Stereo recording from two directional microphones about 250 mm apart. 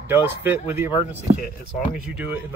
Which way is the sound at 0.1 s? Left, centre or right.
Centre.